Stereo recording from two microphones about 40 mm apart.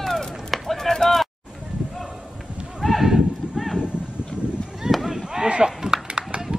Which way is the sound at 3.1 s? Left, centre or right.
Centre.